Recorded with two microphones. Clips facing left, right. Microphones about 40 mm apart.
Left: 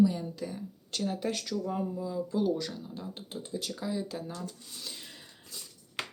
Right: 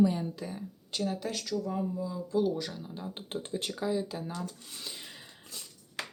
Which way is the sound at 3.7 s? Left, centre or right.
Centre.